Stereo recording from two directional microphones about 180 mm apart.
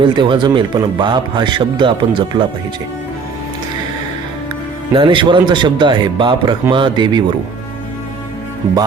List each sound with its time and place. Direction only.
0.0 s speech: 25° right (ahead or behind)
4.9 s speech: 25° right (ahead or behind)